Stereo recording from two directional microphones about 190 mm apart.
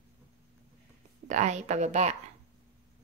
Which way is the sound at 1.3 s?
40° right (ahead or behind).